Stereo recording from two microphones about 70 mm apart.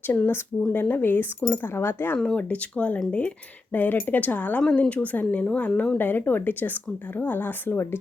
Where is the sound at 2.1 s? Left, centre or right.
Centre.